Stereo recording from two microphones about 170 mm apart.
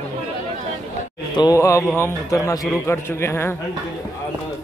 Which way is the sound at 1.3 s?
20° left (ahead or behind).